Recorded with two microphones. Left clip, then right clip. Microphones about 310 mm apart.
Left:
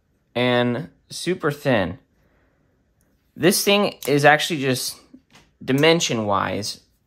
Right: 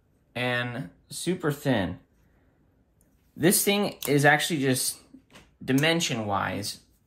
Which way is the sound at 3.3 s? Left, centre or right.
Centre.